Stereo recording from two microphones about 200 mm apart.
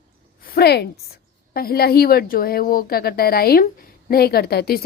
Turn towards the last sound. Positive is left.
turn(degrees=50)  # may be behind; listen again after turning